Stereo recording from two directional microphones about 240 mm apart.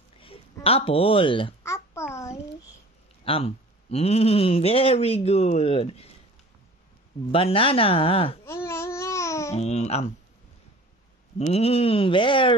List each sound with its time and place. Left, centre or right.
0.2 s babbling: left
3.3 s speech: left
7.3 s speech: left
8.5 s babbling: centre
9.5 s speech: left
11.3 s speech: left